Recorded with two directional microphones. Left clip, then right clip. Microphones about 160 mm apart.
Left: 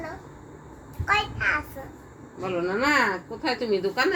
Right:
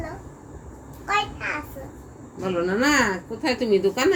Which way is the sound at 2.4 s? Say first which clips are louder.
Right 2 dB; 90° right.